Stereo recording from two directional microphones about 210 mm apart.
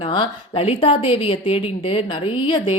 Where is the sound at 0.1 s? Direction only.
25° left (ahead or behind).